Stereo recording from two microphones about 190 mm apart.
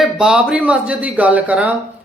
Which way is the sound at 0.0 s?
5° right (ahead or behind).